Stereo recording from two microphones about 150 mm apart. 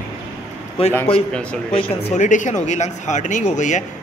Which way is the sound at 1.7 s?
40° left (ahead or behind).